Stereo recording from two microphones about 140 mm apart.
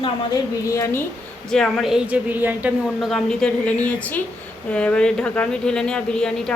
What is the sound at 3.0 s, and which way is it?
A woman's voice, centre (ahead or behind).